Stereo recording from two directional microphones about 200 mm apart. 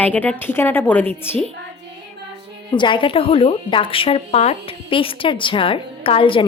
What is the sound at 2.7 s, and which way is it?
Speech, 25° left (ahead or behind).